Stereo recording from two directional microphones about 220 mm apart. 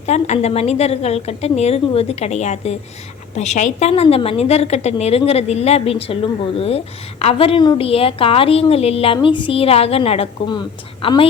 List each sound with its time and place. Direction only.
0.0 s a woman's voice: 30° left (ahead or behind)